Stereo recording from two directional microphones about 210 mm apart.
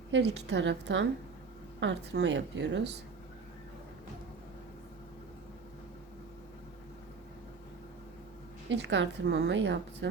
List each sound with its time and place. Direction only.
0.1 s a woman's voice: 55° right (ahead or behind)
8.7 s a woman's voice: 60° right (ahead or behind)